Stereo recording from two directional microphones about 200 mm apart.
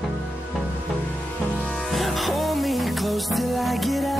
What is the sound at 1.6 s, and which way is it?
Music, centre (ahead or behind).